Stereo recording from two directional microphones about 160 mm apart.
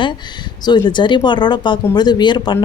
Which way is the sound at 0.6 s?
30° left (ahead or behind).